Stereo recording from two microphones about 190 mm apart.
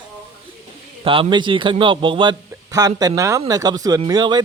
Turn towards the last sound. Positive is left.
turn(degrees=-20)  # may be behind; listen again after turning